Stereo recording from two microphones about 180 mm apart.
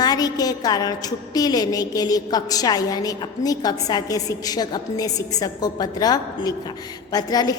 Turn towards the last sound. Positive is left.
turn(degrees=20)  # may be behind; listen again after turning